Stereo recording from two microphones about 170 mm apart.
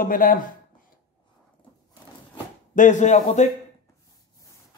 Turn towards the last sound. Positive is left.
turn(degrees=45)  # may be behind; listen again after turning